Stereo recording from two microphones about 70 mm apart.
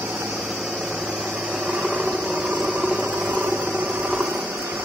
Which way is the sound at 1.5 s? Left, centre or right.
Centre.